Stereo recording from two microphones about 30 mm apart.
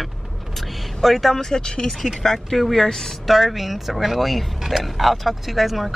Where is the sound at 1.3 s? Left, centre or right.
Centre.